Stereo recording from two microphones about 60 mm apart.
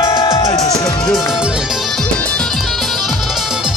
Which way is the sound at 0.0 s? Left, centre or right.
Left.